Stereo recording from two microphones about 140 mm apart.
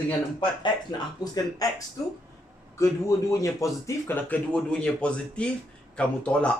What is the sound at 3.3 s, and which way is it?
Speech, 25° left (ahead or behind).